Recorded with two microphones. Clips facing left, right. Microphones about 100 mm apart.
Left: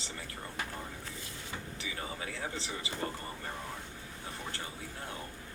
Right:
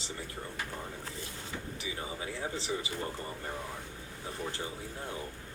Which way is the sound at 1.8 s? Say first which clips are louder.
Even; 20° right (ahead or behind).